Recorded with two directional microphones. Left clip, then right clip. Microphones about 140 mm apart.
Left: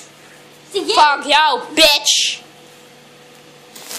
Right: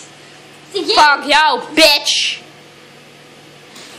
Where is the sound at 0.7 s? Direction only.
45° left (ahead or behind).